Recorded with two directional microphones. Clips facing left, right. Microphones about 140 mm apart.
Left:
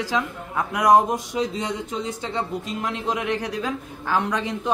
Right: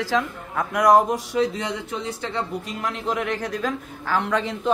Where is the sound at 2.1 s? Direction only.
20° left (ahead or behind).